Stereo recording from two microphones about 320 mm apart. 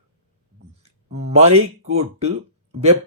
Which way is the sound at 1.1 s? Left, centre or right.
Centre.